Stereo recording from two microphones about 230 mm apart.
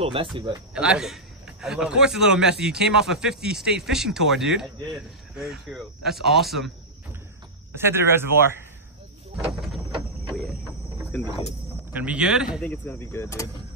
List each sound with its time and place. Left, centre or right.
0.0 s speech: right
0.7 s a man's voice: centre
7.7 s speech: centre
11.9 s a man's voice: centre